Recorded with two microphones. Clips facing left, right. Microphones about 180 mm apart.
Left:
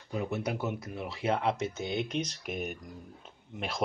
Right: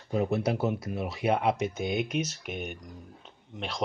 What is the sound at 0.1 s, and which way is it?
Speech, 35° right (ahead or behind).